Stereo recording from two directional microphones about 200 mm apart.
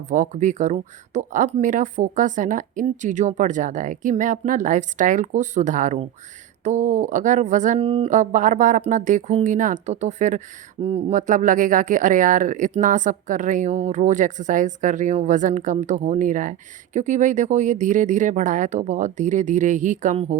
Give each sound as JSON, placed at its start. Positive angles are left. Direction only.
{"t": 0.1, "sound": "speech", "side_deg": -40}